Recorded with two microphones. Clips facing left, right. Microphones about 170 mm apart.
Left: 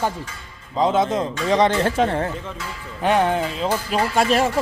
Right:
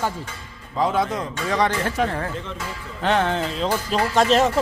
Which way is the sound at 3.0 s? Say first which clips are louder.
Left 2 dB; 15° left (ahead or behind).